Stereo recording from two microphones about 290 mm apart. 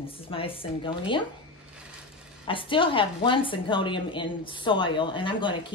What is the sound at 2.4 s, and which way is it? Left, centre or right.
A woman's voice, centre.